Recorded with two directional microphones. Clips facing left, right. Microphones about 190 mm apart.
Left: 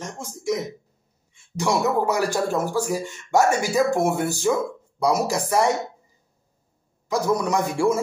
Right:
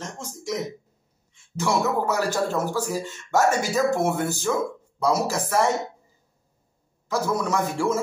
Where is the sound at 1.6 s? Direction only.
15° left (ahead or behind).